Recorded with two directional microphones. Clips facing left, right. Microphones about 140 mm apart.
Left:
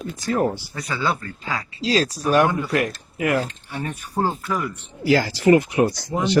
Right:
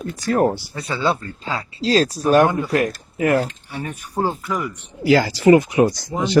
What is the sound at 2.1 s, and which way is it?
Speech, 35° right (ahead or behind).